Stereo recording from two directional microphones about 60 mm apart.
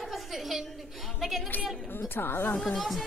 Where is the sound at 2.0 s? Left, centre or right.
Left.